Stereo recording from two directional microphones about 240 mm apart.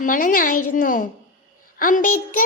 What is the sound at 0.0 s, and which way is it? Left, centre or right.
A child's voice, left.